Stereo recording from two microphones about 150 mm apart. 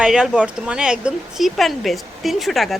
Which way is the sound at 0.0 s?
5° right (ahead or behind).